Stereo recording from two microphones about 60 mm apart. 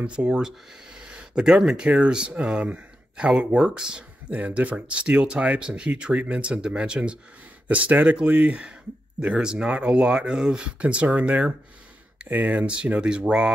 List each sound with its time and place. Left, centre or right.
0.0 s speech: centre